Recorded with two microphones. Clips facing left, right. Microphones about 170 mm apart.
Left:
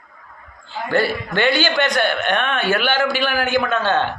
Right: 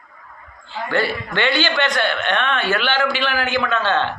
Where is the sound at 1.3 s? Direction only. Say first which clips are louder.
Left 2 dB; 45° left (ahead or behind).